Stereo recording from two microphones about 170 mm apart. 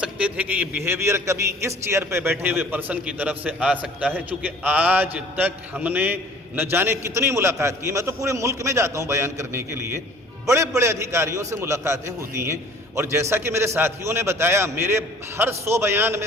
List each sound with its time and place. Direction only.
0.0 s a man's voice: 5° right (ahead or behind)